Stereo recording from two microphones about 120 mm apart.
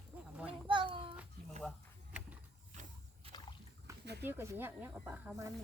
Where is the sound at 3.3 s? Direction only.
35° left (ahead or behind).